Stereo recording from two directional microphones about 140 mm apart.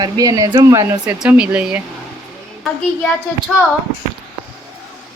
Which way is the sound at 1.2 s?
10° right (ahead or behind).